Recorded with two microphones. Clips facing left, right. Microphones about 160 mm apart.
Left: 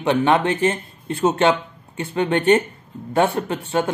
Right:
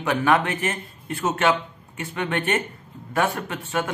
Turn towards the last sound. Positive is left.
turn(degrees=30)  # may be behind; listen again after turning